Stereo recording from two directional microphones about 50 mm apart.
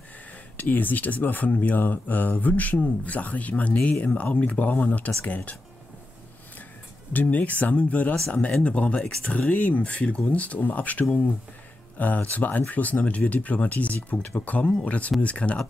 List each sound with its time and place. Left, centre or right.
0.6 s speech: left
7.1 s speech: left